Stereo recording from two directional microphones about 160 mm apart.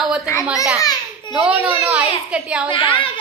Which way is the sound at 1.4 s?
5° right (ahead or behind).